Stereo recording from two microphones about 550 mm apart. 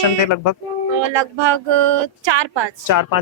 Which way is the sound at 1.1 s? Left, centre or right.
Right.